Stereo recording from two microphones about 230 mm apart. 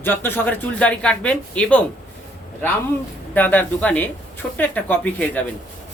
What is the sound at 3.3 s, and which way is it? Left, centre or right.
A man's voice, centre.